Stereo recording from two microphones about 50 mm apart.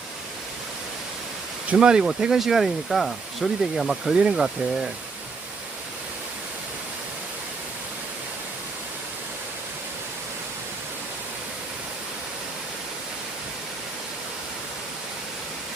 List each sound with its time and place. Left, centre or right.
1.7 s speech: centre